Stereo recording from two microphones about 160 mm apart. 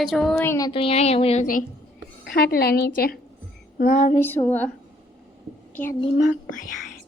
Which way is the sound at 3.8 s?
60° left (ahead or behind).